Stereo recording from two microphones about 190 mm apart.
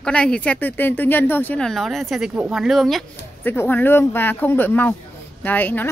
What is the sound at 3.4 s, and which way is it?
Speech, 10° left (ahead or behind).